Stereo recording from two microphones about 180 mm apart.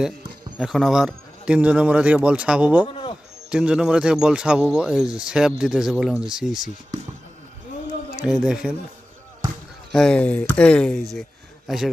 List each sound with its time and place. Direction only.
0.6 s speech: centre (ahead or behind)
2.8 s a man's voice: 30° left (ahead or behind)
3.5 s speech: 5° right (ahead or behind)
8.3 s speech: 5° right (ahead or behind)
9.9 s speech: 5° left (ahead or behind)